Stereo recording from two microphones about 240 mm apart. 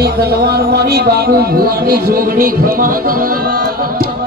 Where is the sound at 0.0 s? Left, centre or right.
Right.